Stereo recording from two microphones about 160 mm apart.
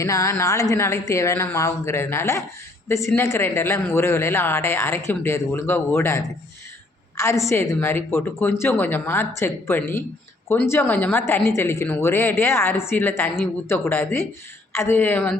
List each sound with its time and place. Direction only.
0.0 s speech: 20° left (ahead or behind)